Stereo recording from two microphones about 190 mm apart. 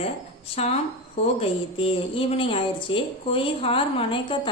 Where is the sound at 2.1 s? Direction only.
30° left (ahead or behind).